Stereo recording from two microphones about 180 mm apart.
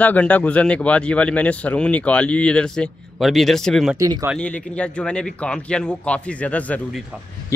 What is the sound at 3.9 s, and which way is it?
Speech, 20° right (ahead or behind).